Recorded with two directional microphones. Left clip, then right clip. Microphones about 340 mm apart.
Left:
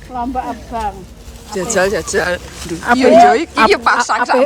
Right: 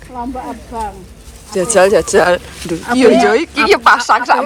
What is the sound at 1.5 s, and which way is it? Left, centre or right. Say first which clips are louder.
Speech: right 5 dB; centre.